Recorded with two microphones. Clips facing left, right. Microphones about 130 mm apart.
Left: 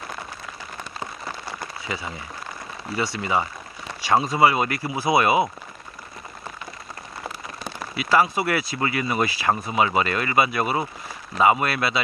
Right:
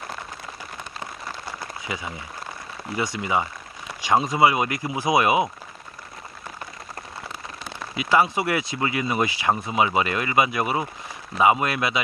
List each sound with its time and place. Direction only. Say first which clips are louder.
1.9 s speech: left 1 dB; 15° right (ahead or behind)
7.9 s speech: even; 15° right (ahead or behind)